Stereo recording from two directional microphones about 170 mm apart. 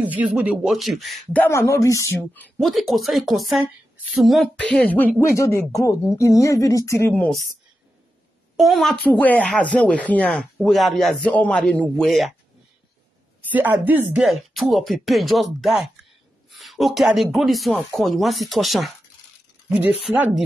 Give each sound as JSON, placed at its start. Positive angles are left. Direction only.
{"t": 0.0, "sound": "speech", "side_deg": -10}
{"t": 1.4, "sound": "speech", "side_deg": 15}
{"t": 2.6, "sound": "speech", "side_deg": 0}
{"t": 8.5, "sound": "speech", "side_deg": 0}
{"t": 13.5, "sound": "speech", "side_deg": -10}